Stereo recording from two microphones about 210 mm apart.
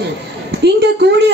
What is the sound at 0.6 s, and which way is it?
Speech, 50° right (ahead or behind).